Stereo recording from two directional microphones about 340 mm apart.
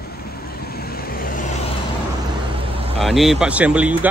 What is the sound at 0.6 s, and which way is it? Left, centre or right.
Vehicle, left.